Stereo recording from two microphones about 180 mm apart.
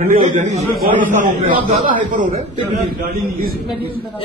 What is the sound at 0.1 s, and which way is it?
A man's voice, 40° right (ahead or behind).